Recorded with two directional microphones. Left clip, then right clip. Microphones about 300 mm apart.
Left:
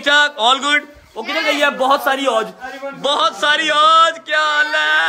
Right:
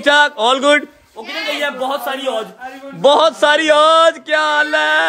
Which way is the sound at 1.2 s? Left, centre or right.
Left.